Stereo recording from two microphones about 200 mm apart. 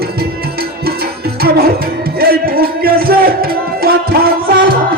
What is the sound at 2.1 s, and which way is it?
Music, 50° right (ahead or behind).